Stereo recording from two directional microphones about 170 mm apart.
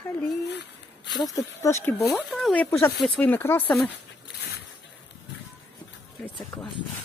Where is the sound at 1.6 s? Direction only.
15° left (ahead or behind).